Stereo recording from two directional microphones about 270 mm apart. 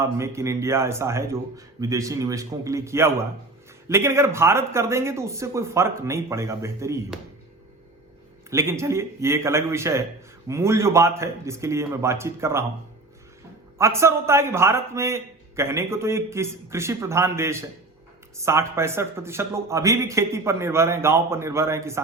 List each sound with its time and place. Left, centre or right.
0.0 s a man's voice: centre
8.4 s a man's voice: centre
13.7 s a man's voice: centre